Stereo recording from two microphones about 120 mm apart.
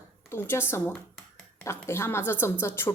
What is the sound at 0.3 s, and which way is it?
Speech, 20° left (ahead or behind).